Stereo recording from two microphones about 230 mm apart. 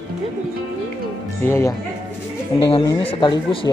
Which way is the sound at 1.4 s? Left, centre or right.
Centre.